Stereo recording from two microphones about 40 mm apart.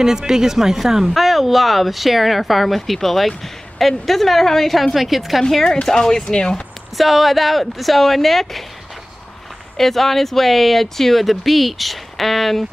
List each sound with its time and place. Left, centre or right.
0.0 s speech: centre
5.5 s speech: centre
7.0 s speech: centre
9.8 s speech: centre